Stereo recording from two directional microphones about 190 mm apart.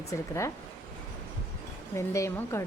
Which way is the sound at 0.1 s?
15° left (ahead or behind).